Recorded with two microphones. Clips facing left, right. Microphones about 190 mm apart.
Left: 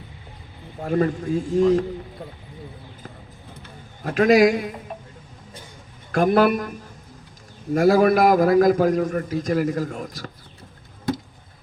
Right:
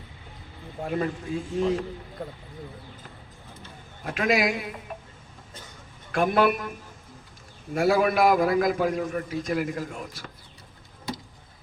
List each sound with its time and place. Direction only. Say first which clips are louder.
0.9 s a man's voice: left 7 dB; 40° left (ahead or behind)
4.0 s a man's voice: left 9 dB; 40° left (ahead or behind)
6.1 s a man's voice: left 5 dB; 40° left (ahead or behind)